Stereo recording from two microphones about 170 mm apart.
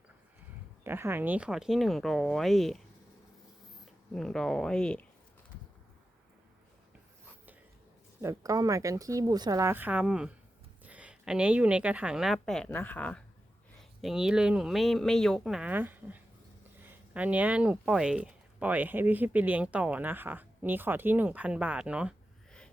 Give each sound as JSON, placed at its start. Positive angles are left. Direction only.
{"t": 0.9, "sound": "speech", "side_deg": -15}
{"t": 4.1, "sound": "speech", "side_deg": 5}
{"t": 8.2, "sound": "speech", "side_deg": -20}
{"t": 14.0, "sound": "speech", "side_deg": -5}